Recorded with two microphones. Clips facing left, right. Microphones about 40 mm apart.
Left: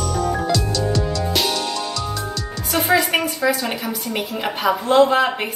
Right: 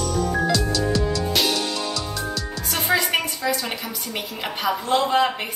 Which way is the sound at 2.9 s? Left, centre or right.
Centre.